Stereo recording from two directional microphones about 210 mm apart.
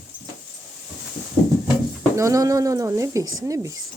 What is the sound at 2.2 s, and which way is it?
Speech, 15° right (ahead or behind).